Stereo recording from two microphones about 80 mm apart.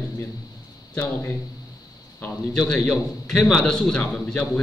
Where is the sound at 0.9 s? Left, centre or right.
Left.